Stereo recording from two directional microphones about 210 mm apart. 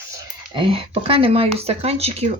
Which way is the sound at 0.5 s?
25° right (ahead or behind).